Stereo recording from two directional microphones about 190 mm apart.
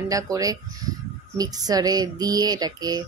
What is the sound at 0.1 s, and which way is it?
Speech, 20° right (ahead or behind).